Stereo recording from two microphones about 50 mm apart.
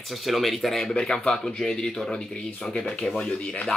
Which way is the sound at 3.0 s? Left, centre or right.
Centre.